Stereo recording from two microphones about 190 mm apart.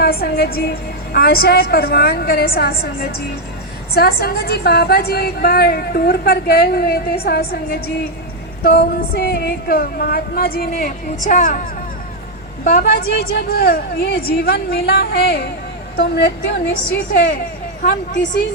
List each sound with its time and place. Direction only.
0.0 s a woman's voice: 55° left (ahead or behind)
12.6 s a woman's voice: 55° left (ahead or behind)